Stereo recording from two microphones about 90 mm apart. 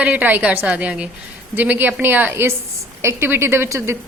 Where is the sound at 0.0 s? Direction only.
15° right (ahead or behind).